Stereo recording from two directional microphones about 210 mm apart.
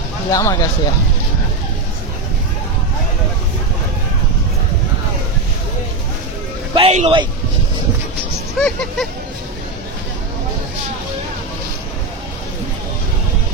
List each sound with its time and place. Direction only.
0.3 s speech: 15° left (ahead or behind)
6.7 s speech: 30° right (ahead or behind)
8.5 s speech: 5° left (ahead or behind)